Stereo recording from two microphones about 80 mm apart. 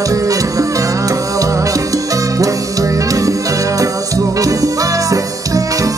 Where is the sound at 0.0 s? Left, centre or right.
Right.